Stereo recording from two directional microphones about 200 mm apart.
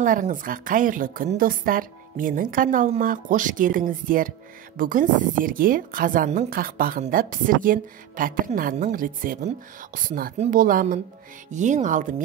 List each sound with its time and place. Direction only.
0.0 s a woman's voice: 40° right (ahead or behind)